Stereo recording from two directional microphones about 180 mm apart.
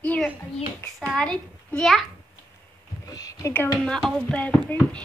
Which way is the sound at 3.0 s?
20° left (ahead or behind).